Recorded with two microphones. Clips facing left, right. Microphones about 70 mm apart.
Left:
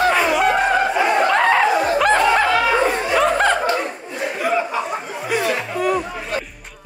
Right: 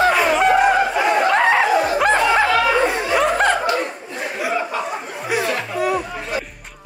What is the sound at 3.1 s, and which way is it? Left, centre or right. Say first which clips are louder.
Snicker: even; centre.